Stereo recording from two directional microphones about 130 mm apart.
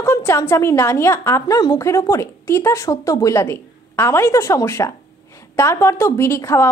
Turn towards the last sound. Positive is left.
turn(degrees=20)  # may be behind; listen again after turning